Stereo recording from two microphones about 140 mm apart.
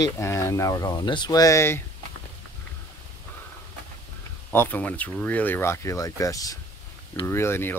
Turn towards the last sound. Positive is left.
turn(degrees=15)  # may be behind; listen again after turning